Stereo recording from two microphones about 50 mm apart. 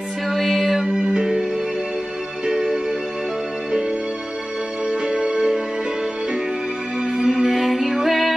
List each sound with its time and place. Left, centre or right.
0.3 s music: centre
2.4 s music: centre
4.8 s music: centre
7.0 s music: right
7.2 s music: centre